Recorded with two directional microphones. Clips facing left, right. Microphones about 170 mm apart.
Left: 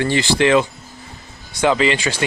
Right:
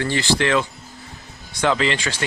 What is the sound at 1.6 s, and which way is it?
Speech, 5° left (ahead or behind).